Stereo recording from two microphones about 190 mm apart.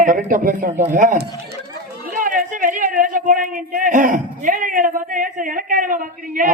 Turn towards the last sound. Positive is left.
turn(degrees=-45)  # may be behind; listen again after turning